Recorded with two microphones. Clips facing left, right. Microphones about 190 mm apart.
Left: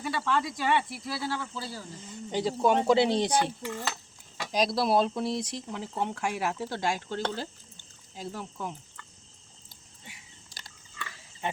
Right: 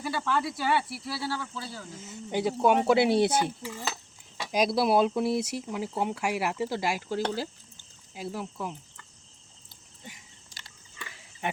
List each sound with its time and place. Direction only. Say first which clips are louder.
0.0 s speech: even; 5° right (ahead or behind)
2.0 s speech: right 1 dB; 10° right (ahead or behind)
10.9 s pig: left 2 dB; 15° right (ahead or behind)